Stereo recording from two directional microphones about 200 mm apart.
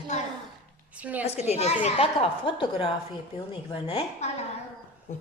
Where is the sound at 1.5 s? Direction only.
30° left (ahead or behind).